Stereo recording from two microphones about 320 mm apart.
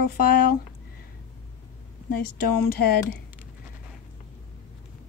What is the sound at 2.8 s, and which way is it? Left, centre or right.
Speech, left.